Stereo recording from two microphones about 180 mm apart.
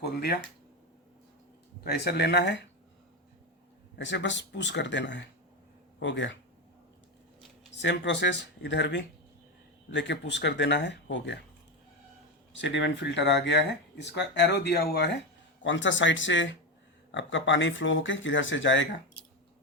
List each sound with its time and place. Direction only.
0.0 s a sound: 60° left (ahead or behind)
1.8 s speech: 60° left (ahead or behind)
3.9 s speech: 85° left
6.0 s speech: 90° left
7.8 s speech: 75° left (ahead or behind)
12.5 s speech: 80° left
15.6 s speech: 90° left